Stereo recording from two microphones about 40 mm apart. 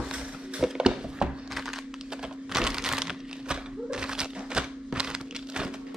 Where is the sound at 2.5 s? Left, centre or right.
Centre.